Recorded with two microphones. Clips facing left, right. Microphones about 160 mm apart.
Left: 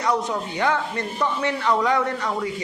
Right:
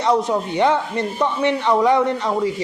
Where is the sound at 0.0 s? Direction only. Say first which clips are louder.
Right 5 dB; 25° right (ahead or behind).